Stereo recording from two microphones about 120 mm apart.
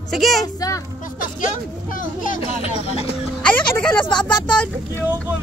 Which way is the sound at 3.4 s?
10° left (ahead or behind).